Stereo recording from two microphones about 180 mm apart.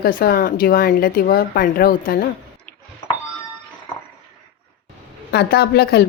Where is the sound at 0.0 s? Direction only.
55° left (ahead or behind).